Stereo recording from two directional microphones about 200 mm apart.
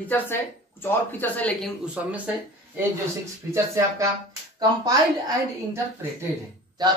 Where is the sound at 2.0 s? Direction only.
5° right (ahead or behind).